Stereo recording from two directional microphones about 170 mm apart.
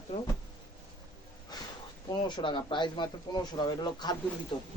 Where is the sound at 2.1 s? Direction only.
25° left (ahead or behind).